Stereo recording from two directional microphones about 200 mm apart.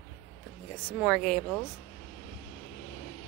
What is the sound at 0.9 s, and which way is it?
Speech, 5° left (ahead or behind).